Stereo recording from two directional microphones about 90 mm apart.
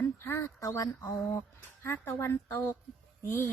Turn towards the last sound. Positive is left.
turn(degrees=25)  # may be behind; listen again after turning